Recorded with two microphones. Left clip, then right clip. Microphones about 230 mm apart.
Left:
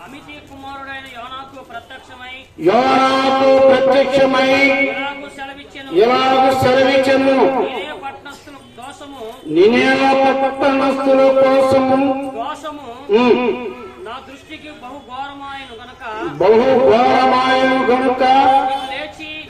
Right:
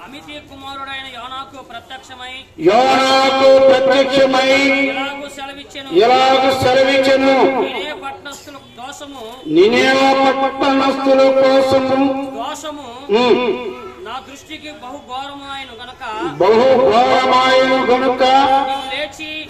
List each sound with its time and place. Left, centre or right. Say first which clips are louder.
0.8 s a man's voice: right 2 dB; right
2.6 s a man's voice: right 1 dB; right
9.5 s a man's voice: right 1 dB; right
16.0 s music: right 1 dB; right